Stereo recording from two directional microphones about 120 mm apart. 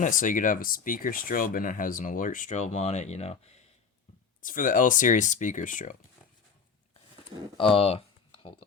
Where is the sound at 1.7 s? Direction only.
90° left; by 3.6 s 65° left (ahead or behind).